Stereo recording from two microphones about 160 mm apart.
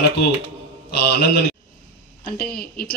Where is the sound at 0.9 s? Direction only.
90° left.